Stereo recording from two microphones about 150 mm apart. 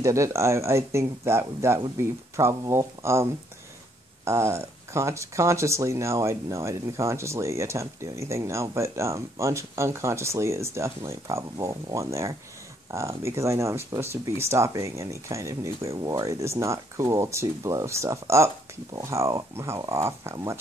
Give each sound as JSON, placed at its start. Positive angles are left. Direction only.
{"t": 0.0, "sound": "speech", "side_deg": -20}